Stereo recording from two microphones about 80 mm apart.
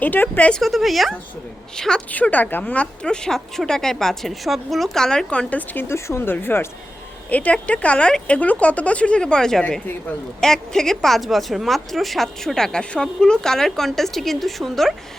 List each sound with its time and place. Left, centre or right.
0.0 s speech: left
0.6 s speech: centre
2.0 s speech: centre
5.9 s speech: left; by 14.9 s centre